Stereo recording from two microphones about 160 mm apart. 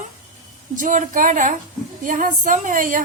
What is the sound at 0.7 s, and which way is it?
A woman's voice, 55° right (ahead or behind).